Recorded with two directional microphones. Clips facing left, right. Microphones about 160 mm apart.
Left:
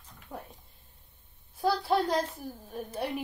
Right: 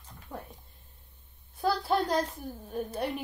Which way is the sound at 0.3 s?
20° left (ahead or behind).